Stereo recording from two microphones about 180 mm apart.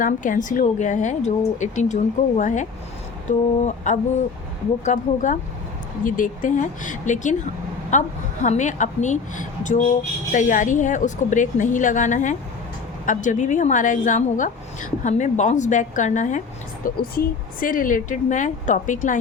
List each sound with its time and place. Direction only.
0.0 s a woman's voice: 45° left (ahead or behind)